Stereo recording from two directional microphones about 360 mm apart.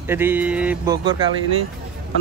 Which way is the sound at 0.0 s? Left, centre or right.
Centre.